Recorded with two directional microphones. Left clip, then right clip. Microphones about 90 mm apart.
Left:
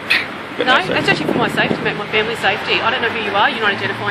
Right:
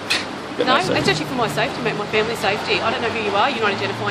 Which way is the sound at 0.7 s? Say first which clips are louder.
Left 4 dB; 20° right (ahead or behind).